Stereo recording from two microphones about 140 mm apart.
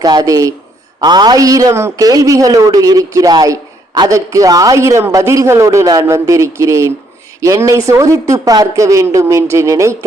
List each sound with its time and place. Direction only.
0.0 s a man's voice: 30° right (ahead or behind)